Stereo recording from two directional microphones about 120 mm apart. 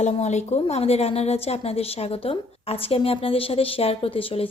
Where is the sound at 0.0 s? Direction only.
70° left (ahead or behind).